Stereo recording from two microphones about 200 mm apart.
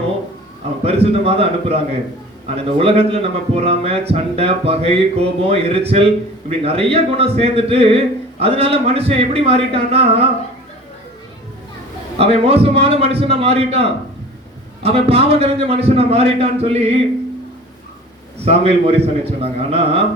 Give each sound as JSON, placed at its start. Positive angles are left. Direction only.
{"t": 0.8, "sound": "a man's voice", "side_deg": -30}
{"t": 12.1, "sound": "a man's voice", "side_deg": -30}
{"t": 18.4, "sound": "a man's voice", "side_deg": -30}